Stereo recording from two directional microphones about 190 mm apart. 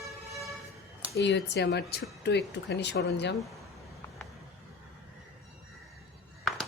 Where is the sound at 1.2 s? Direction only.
65° left (ahead or behind).